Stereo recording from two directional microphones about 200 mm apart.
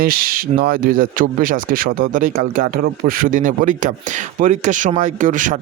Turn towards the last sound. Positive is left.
turn(degrees=-40)  # may be behind; listen again after turning